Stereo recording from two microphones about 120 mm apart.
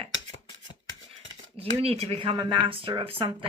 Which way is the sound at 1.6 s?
55° right (ahead or behind).